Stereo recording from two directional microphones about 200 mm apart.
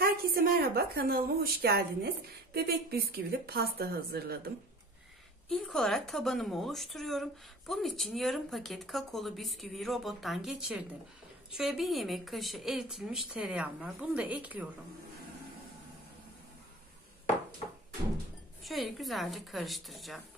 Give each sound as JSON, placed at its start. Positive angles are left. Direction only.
{"t": 0.0, "sound": "a woman's voice", "side_deg": -50}
{"t": 5.5, "sound": "a woman's voice", "side_deg": 0}
{"t": 18.6, "sound": "a woman's voice", "side_deg": 0}